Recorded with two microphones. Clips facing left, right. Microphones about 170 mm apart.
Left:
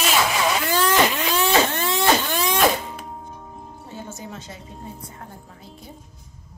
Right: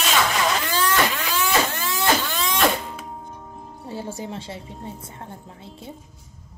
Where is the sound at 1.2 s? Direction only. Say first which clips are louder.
Left 3 dB; 25° left (ahead or behind).